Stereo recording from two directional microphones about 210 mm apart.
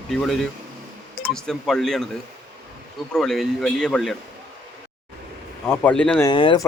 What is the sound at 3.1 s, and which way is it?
A man's voice, centre (ahead or behind).